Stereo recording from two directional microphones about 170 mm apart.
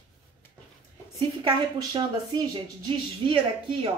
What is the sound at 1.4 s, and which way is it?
A woman's voice, 25° right (ahead or behind).